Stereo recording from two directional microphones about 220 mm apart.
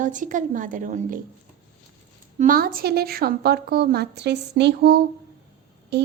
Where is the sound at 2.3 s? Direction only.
40° right (ahead or behind).